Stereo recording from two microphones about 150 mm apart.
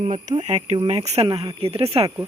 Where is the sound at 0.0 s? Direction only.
55° right (ahead or behind).